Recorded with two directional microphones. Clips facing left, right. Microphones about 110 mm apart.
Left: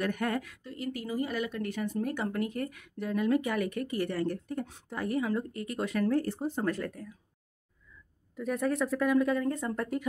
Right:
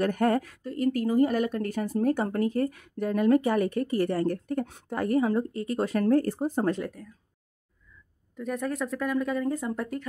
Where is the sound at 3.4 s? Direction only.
35° right (ahead or behind); by 5.2 s 55° right (ahead or behind).